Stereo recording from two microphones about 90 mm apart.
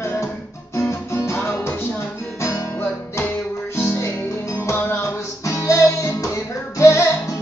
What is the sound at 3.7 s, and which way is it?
Music, 30° left (ahead or behind).